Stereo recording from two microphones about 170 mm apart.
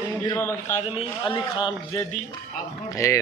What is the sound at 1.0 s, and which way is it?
A man's voice, 25° left (ahead or behind).